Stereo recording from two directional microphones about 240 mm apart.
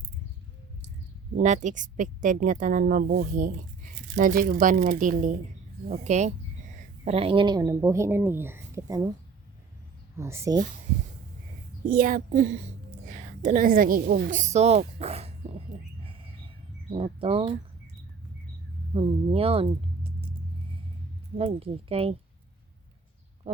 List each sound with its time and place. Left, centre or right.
1.4 s a woman's voice: right; by 9.0 s centre
10.2 s speech: centre
11.9 s a woman's voice: right
16.9 s speech: right
18.9 s speech: right
21.3 s speech: right